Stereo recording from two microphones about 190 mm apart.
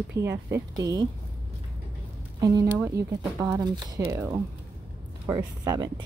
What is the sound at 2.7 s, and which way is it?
Speech, 10° right (ahead or behind).